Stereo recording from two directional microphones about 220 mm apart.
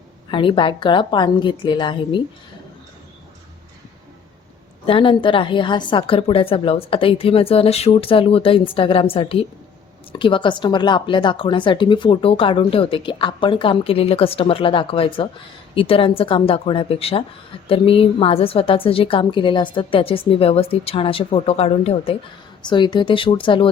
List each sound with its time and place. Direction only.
0.3 s speech: 25° left (ahead or behind)
4.9 s speech: 25° left (ahead or behind)